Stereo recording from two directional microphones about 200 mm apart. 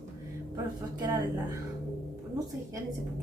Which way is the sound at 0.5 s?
20° right (ahead or behind).